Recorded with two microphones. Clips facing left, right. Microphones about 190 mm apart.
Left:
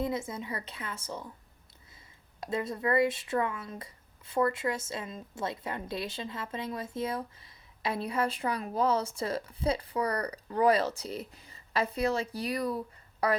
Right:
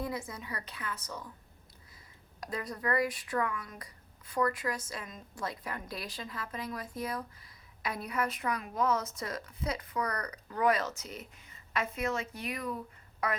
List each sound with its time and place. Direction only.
0.0 s speech: 25° left (ahead or behind)
2.4 s speech: 25° left (ahead or behind)